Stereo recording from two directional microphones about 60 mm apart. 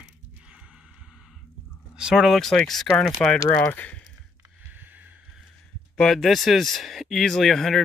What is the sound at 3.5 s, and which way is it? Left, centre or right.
Speech, left.